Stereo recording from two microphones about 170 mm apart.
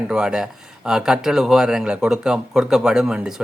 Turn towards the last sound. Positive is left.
turn(degrees=-5)  # may be behind; listen again after turning